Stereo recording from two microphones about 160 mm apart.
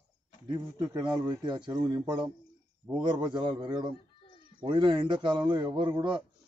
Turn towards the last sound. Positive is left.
turn(degrees=-30)  # may be behind; listen again after turning